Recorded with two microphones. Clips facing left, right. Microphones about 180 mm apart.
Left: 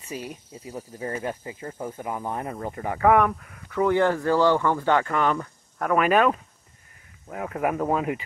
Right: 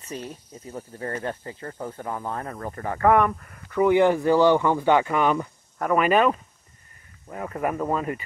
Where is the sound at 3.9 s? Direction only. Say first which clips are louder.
Right 3 dB; 15° right (ahead or behind).